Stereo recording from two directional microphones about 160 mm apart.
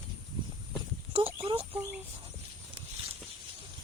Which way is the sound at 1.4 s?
35° right (ahead or behind).